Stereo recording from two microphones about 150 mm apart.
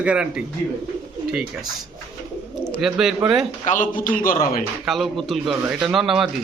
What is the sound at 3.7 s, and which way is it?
Speech, 60° left (ahead or behind).